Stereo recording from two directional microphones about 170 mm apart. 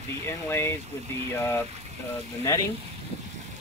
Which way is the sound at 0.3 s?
15° left (ahead or behind).